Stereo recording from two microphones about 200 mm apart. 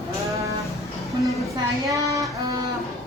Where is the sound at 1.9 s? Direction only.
15° right (ahead or behind).